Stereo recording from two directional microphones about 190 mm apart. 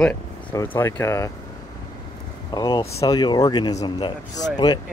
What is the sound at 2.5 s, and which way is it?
Speech, 20° left (ahead or behind).